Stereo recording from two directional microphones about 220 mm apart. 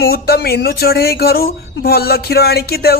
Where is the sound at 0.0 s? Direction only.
45° left (ahead or behind).